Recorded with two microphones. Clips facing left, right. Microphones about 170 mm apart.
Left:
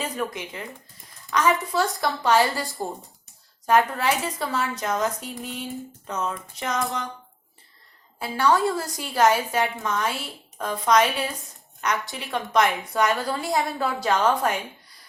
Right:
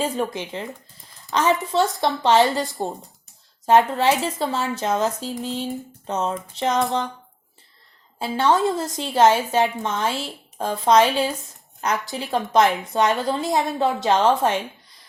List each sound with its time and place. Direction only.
0.0 s a woman's voice: 30° right (ahead or behind)
8.2 s a woman's voice: 25° right (ahead or behind)